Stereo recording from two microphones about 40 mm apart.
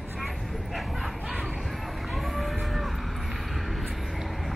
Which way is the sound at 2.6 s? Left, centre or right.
Centre.